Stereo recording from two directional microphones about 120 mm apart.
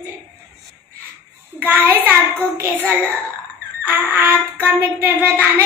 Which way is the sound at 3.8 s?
20° right (ahead or behind).